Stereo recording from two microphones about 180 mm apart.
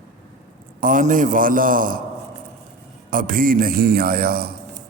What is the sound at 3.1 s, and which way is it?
A man's voice, 50° right (ahead or behind).